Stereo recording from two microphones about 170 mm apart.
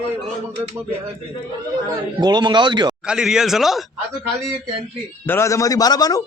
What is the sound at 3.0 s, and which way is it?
Speech, 5° right (ahead or behind).